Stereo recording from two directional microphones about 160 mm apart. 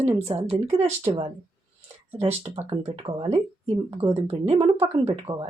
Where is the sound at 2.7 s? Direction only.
35° right (ahead or behind).